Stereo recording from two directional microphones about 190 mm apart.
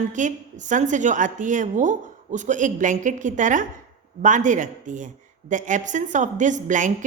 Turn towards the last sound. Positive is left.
turn(degrees=-40)  # may be behind; listen again after turning